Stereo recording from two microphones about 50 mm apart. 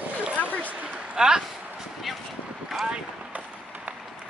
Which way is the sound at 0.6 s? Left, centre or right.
Right.